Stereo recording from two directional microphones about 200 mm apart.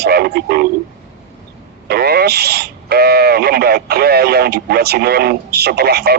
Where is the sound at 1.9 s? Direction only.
50° right (ahead or behind).